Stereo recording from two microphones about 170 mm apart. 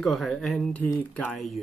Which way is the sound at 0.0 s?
Centre (ahead or behind).